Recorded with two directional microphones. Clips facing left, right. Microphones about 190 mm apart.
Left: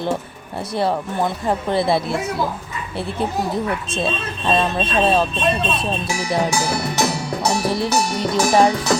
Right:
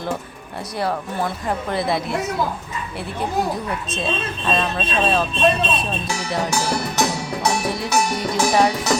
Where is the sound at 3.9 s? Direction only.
30° left (ahead or behind).